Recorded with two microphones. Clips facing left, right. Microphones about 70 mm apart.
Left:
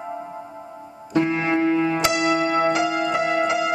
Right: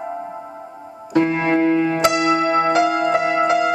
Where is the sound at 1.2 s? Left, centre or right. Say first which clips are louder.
Right 3 dB; right.